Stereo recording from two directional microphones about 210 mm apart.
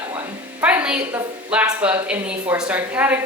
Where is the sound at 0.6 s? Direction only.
5° right (ahead or behind).